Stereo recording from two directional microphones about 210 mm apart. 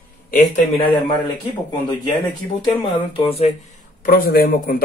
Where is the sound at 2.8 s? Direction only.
25° left (ahead or behind).